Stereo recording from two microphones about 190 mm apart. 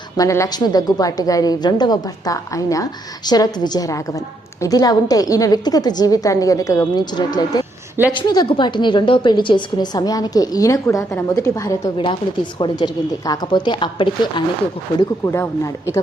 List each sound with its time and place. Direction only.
0.2 s a woman's voice: 15° left (ahead or behind)
15.2 s speech: 15° left (ahead or behind)